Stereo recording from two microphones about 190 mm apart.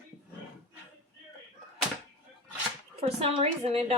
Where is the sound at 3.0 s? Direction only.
35° right (ahead or behind).